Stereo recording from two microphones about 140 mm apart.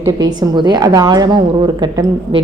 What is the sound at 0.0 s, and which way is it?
A woman's voice, 30° right (ahead or behind).